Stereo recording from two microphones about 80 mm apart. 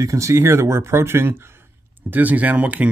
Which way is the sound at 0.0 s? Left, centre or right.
Right.